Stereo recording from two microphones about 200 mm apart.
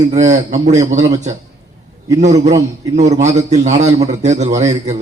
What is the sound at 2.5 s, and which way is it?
Speech, 15° right (ahead or behind).